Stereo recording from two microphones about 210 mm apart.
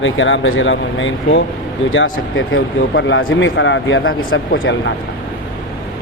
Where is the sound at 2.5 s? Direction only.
65° left (ahead or behind).